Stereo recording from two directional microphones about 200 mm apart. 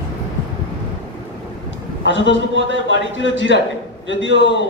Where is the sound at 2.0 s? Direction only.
65° left (ahead or behind).